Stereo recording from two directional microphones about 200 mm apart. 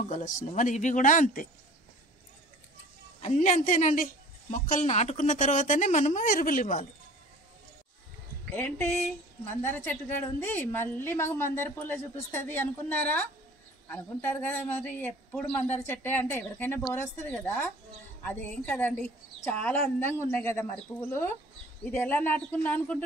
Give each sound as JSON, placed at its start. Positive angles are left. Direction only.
{"t": 0.1, "sound": "a woman's voice", "side_deg": 40}
{"t": 3.2, "sound": "a woman's voice", "side_deg": 35}
{"t": 8.5, "sound": "a woman's voice", "side_deg": 10}
{"t": 21.8, "sound": "a woman's voice", "side_deg": 10}